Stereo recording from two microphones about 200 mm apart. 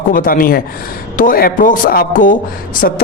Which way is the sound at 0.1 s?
45° left (ahead or behind).